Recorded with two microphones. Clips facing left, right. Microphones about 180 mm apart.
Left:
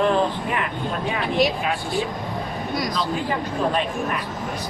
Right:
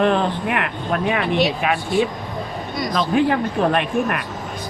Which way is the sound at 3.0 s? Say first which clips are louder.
Right 7 dB; 65° right (ahead or behind).